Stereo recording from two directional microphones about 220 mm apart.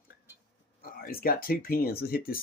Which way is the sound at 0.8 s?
40° left (ahead or behind).